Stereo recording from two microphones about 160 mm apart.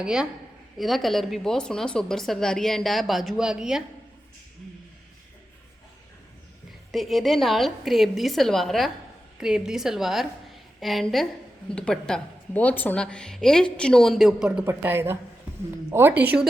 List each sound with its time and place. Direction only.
0.0 s a woman's voice: 5° right (ahead or behind)
6.9 s a woman's voice: centre (ahead or behind)